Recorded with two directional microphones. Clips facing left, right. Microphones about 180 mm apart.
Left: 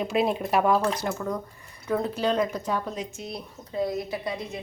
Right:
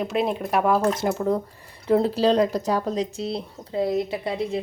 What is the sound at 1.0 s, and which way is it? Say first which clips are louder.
Speech: right 6 dB; 25° right (ahead or behind).